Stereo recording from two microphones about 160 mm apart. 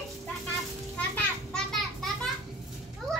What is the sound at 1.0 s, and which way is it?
Children playing, 5° left (ahead or behind).